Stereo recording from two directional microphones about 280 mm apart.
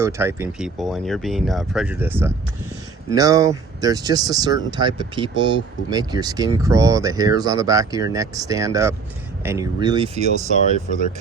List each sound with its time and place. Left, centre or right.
0.0 s speech: centre
10.3 s speech: left